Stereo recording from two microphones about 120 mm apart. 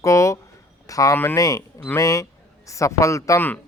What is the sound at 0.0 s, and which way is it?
A man's voice, 25° left (ahead or behind).